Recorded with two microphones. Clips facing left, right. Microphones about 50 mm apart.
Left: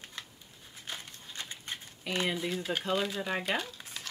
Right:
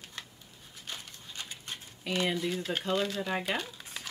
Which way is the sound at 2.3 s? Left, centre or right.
Centre.